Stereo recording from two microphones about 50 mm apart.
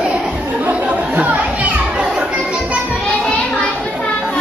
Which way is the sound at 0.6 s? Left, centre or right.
Right.